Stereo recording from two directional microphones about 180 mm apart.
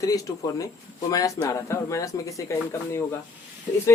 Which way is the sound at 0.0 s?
20° left (ahead or behind).